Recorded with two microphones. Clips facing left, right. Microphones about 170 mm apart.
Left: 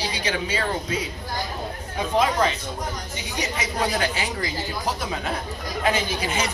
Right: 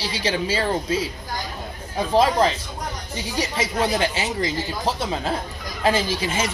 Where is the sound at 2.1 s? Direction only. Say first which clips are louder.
Right 3 dB; 30° right (ahead or behind).